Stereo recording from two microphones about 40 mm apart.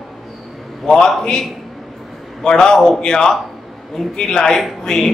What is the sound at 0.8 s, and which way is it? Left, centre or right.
Speech, centre.